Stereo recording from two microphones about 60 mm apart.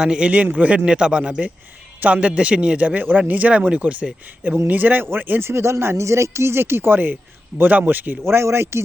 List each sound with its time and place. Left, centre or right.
0.0 s a man's voice: centre
0.3 s a man's voice: right
8.4 s speech: right